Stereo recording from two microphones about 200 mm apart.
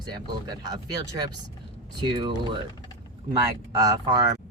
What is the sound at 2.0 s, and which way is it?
Speech, 25° right (ahead or behind).